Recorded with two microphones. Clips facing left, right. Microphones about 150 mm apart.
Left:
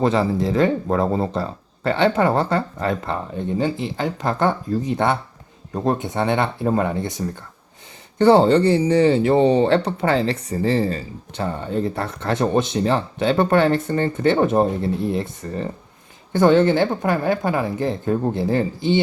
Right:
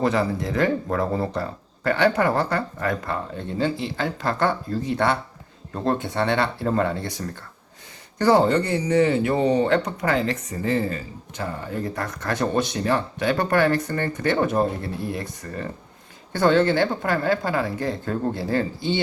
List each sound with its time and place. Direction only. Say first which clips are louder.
0.0 s speech: left 4 dB; 25° left (ahead or behind)